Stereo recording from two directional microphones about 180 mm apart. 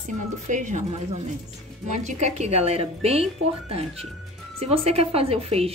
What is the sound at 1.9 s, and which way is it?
Speech, 40° right (ahead or behind).